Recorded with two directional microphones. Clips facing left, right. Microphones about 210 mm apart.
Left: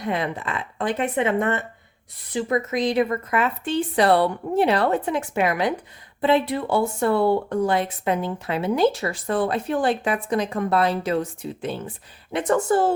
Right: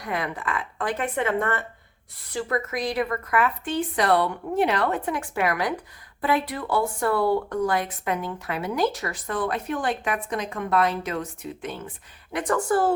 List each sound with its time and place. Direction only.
0.0 s speech: 25° left (ahead or behind)